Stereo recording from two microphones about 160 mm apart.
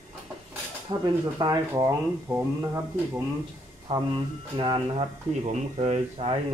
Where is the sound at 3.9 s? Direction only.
35° right (ahead or behind).